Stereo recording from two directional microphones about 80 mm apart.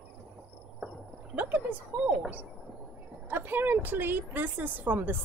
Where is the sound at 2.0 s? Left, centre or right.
Centre.